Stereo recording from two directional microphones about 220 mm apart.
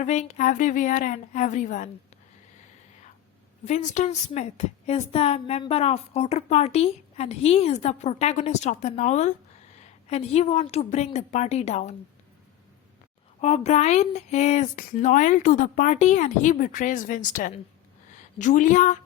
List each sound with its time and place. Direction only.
0.0 s speech: 30° left (ahead or behind)
3.6 s a woman's voice: 35° left (ahead or behind)
13.4 s a woman's voice: 30° left (ahead or behind)